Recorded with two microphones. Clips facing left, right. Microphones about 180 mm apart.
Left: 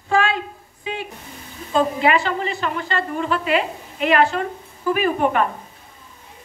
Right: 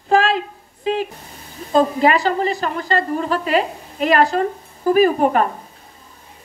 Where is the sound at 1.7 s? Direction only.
40° right (ahead or behind).